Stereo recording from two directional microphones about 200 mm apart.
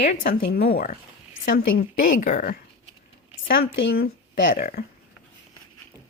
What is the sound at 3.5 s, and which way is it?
Speech, 60° left (ahead or behind).